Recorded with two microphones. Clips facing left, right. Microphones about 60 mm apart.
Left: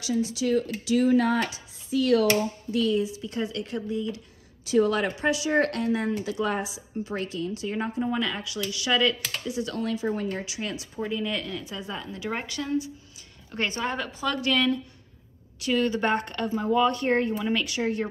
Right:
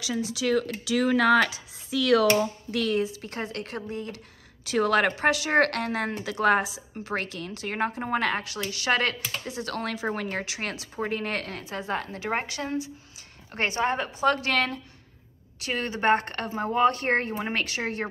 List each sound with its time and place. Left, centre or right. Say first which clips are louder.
0.3 s speech: even; right
3.0 s a woman's voice: left 1 dB; right
4.6 s speech: even; right
5.1 s a woman's voice: right 1 dB; right
9.8 s a woman's voice: even; right
12.2 s speech: right 2 dB; right
14.3 s speech: left 1 dB; right